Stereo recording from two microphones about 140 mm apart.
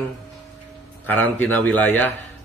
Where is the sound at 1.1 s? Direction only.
10° left (ahead or behind).